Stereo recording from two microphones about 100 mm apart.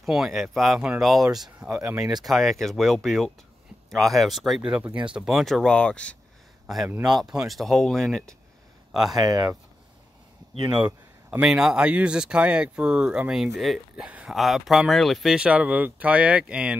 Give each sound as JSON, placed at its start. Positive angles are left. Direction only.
{"t": 0.0, "sound": "speech", "side_deg": 0}
{"t": 7.0, "sound": "speech", "side_deg": -5}
{"t": 9.1, "sound": "speech", "side_deg": -40}
{"t": 11.2, "sound": "speech", "side_deg": -5}
{"t": 14.0, "sound": "speech", "side_deg": -10}
{"t": 14.3, "sound": "speech", "side_deg": 0}